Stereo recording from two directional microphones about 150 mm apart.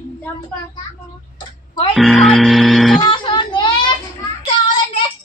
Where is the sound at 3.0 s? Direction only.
30° left (ahead or behind).